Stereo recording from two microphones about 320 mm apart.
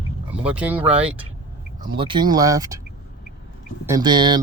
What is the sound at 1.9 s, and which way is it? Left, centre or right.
Speech, centre.